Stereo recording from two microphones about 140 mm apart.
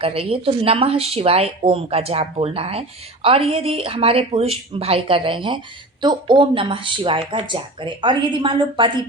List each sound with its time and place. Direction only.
0.0 s speech: 45° right (ahead or behind)